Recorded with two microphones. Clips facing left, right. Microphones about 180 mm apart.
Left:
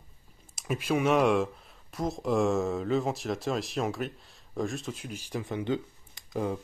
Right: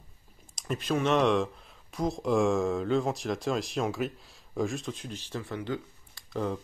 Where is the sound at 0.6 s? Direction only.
10° left (ahead or behind).